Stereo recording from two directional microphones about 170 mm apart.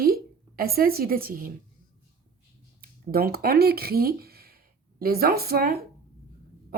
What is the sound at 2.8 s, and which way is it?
A woman's voice, 60° right (ahead or behind).